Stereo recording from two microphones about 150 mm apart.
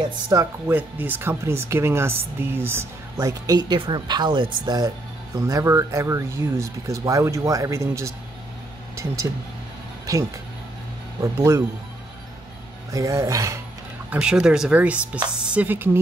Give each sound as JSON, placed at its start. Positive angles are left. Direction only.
{"t": 0.3, "sound": "speech", "side_deg": -20}
{"t": 11.1, "sound": "speech", "side_deg": -20}
{"t": 12.9, "sound": "speech", "side_deg": -20}
{"t": 14.1, "sound": "speech", "side_deg": -5}